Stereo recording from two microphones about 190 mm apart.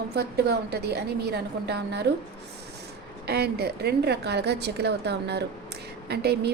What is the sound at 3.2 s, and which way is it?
A woman's voice, 60° right (ahead or behind).